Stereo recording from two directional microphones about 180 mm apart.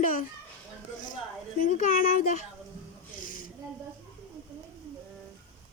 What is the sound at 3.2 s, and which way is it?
Snake, 50° left (ahead or behind).